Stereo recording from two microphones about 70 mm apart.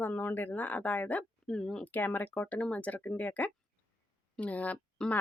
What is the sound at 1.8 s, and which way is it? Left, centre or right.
Speech, left.